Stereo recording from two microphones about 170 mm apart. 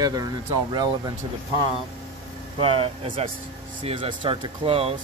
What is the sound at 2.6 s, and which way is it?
Speech, 35° right (ahead or behind).